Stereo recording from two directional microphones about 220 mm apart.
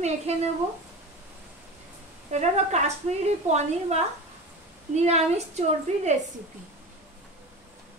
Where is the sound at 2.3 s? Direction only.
30° right (ahead or behind).